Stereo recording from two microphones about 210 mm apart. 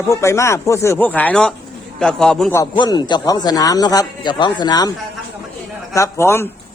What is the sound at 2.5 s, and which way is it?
A man's voice, 20° left (ahead or behind).